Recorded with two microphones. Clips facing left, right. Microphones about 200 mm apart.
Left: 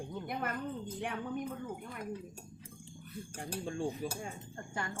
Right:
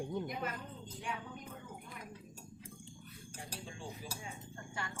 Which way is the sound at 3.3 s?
50° left (ahead or behind).